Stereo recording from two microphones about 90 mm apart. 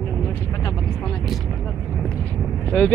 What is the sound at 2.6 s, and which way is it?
Speech, 15° left (ahead or behind).